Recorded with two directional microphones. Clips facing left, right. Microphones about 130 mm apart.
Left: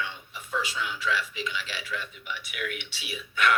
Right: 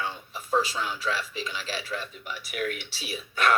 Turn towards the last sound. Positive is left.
turn(degrees=-35)  # may be behind; listen again after turning